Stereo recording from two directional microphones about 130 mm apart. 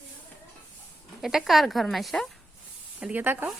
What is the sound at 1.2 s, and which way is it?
Speech, 5° right (ahead or behind).